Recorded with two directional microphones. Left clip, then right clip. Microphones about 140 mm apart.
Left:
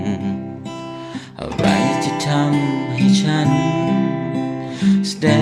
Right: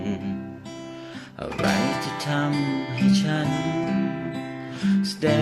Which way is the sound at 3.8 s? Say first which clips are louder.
Left 7 dB; 30° left (ahead or behind).